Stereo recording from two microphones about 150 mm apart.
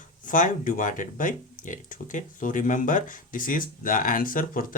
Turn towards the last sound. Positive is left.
turn(degrees=70)  # may be behind; listen again after turning